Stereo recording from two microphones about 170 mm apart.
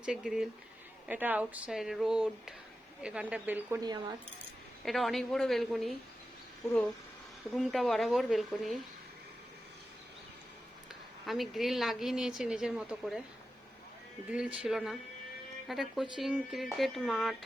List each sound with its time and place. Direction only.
0.0 s a woman's voice: 5° right (ahead or behind)
3.8 s speech: 25° right (ahead or behind)
4.9 s a woman's voice: centre (ahead or behind)
11.3 s a woman's voice: centre (ahead or behind)
14.3 s a woman's voice: 5° right (ahead or behind)